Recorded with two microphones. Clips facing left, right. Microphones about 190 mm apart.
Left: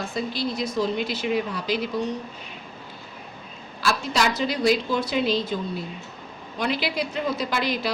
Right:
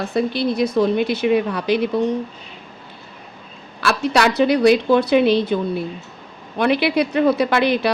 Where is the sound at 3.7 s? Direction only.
65° right (ahead or behind).